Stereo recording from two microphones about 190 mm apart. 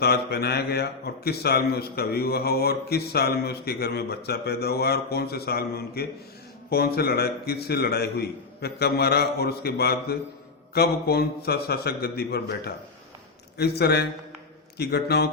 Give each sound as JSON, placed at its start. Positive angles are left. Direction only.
{"t": 0.0, "sound": "a man's voice", "side_deg": 55}